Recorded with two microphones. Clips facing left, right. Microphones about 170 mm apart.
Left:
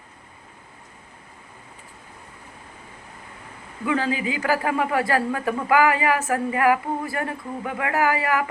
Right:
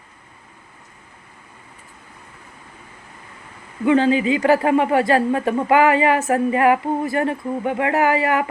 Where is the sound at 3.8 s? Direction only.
25° right (ahead or behind).